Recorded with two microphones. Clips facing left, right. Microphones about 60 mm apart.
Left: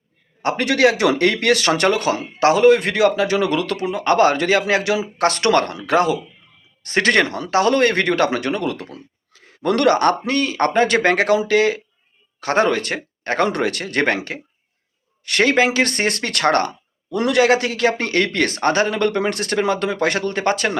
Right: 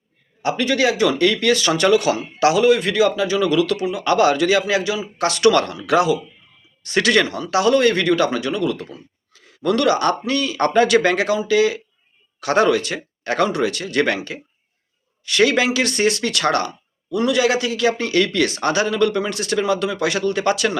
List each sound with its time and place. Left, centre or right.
0.4 s speech: left
12.4 s speech: left
14.2 s speech: left
17.2 s speech: left